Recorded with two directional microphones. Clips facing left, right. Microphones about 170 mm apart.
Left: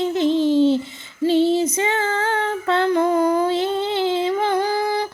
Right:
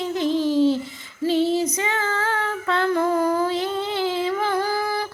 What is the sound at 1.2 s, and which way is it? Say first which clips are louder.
Female singing: left 3 dB; 25° left (ahead or behind).